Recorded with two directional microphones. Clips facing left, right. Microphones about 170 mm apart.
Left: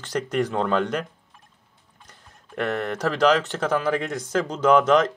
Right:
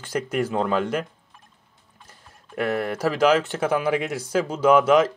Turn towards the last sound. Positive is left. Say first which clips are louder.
# right 1 dB
turn(degrees=-5)  # may be behind; listen again after turning